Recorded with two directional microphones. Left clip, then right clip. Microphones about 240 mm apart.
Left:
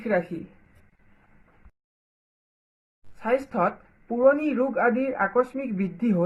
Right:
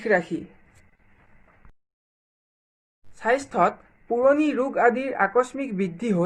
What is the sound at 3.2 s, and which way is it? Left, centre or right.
Speech, right.